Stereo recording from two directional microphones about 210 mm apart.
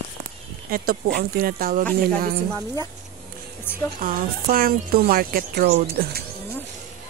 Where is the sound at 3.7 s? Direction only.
10° left (ahead or behind).